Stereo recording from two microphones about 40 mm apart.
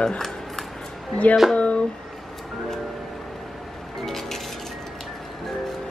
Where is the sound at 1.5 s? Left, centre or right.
Left.